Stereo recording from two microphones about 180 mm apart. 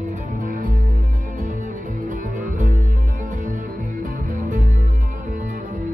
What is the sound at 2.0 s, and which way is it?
Music, 45° right (ahead or behind).